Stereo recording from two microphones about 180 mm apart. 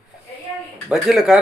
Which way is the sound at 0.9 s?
5° right (ahead or behind).